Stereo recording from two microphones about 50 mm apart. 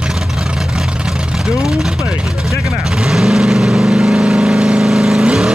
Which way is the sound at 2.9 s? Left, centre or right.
Centre.